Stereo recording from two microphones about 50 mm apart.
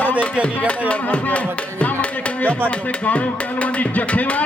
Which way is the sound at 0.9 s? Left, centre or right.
Left.